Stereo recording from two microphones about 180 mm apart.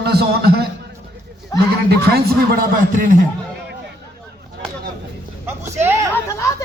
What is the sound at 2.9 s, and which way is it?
Speech, 45° right (ahead or behind).